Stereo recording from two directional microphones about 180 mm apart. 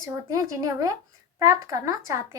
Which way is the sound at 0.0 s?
20° right (ahead or behind).